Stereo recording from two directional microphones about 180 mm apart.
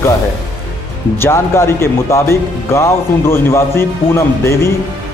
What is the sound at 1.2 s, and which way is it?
Speech, 15° left (ahead or behind).